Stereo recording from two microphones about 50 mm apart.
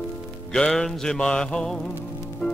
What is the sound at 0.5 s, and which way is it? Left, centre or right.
Music, centre.